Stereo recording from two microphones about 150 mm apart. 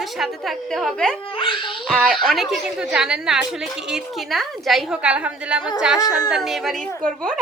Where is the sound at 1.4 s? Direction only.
35° left (ahead or behind).